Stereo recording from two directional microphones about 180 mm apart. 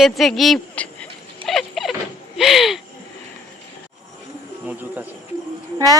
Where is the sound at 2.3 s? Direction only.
Centre (ahead or behind).